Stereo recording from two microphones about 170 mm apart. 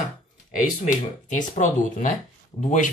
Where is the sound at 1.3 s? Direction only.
50° left (ahead or behind).